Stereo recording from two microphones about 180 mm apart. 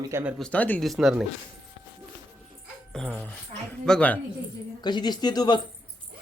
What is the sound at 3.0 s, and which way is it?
Speech, 5° left (ahead or behind).